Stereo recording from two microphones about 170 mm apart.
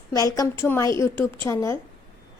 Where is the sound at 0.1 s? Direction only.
20° left (ahead or behind).